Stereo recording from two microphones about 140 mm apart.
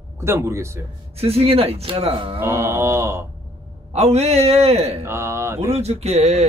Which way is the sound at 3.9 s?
50° right (ahead or behind).